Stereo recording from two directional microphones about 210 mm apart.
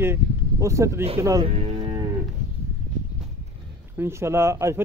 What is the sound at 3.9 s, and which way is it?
Speech, 10° right (ahead or behind).